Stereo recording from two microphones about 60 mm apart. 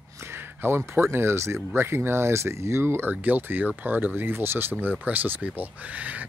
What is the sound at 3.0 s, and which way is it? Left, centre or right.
Speech, right.